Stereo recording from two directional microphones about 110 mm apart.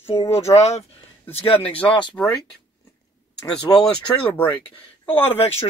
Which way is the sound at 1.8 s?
45° left (ahead or behind).